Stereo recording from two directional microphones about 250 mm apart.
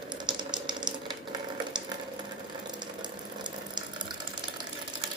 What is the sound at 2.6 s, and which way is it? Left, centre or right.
Water, centre.